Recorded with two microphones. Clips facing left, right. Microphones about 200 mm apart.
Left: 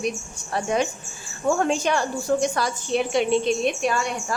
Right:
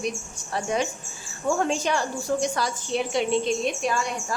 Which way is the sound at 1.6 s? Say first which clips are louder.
Left 2 dB; 60° left (ahead or behind).